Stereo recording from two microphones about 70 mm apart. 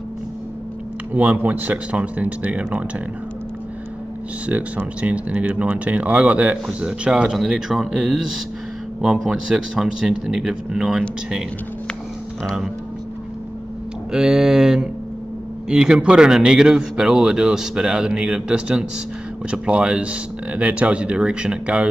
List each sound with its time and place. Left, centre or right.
1.1 s speech: right
4.5 s speech: right; by 11.4 s centre
14.1 s speech: centre